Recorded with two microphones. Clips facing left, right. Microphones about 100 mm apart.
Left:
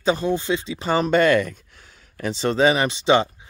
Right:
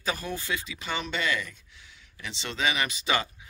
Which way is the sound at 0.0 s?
25° left (ahead or behind).